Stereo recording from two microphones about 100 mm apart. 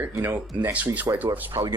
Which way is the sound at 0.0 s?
20° right (ahead or behind).